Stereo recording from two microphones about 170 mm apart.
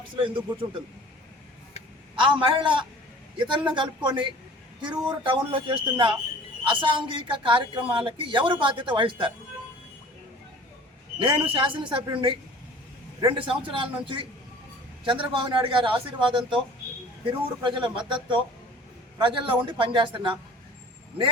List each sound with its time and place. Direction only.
0.2 s speech: 30° right (ahead or behind)
2.2 s speech: 30° right (ahead or behind)
11.2 s speech: 30° right (ahead or behind)
17.6 s speech: 30° right (ahead or behind)